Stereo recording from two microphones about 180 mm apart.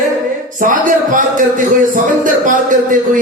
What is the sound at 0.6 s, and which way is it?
Speech, 45° right (ahead or behind).